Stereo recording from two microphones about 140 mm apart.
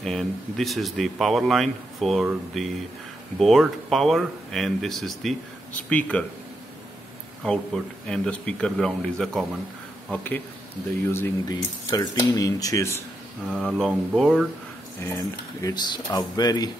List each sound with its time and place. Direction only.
0.0 s speech: 5° left (ahead or behind)
7.4 s speech: 5° left (ahead or behind)
11.4 s speech: 30° left (ahead or behind)
13.5 s speech: centre (ahead or behind)
15.0 s speech: 20° left (ahead or behind)